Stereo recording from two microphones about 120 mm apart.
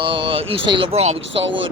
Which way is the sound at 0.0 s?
50° right (ahead or behind).